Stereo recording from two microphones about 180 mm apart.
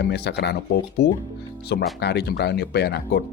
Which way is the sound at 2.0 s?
65° left (ahead or behind).